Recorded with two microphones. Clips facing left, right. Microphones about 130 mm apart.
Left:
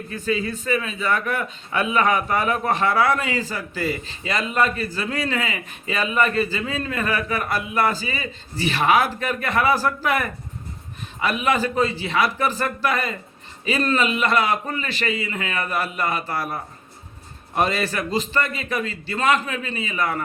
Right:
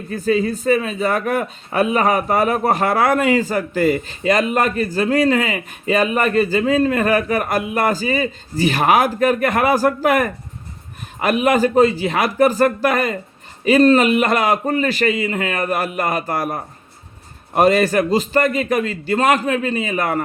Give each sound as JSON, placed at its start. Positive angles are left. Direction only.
{"t": 0.1, "sound": "speech", "side_deg": -40}